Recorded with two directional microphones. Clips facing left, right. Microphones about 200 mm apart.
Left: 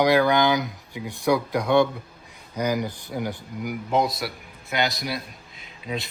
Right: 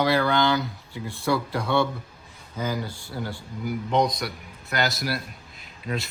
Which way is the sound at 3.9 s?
5° left (ahead or behind).